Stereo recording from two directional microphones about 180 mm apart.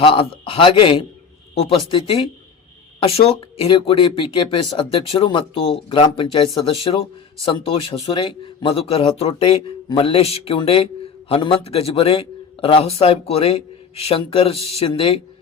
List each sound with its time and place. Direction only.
0.0 s a man's voice: 30° left (ahead or behind)